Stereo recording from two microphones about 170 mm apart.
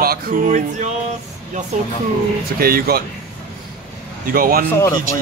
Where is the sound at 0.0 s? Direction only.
60° right (ahead or behind).